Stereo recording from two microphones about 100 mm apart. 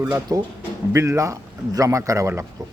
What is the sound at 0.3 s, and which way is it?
Speech, 40° right (ahead or behind).